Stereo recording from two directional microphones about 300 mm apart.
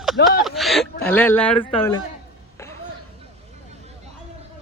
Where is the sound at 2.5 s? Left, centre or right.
Centre.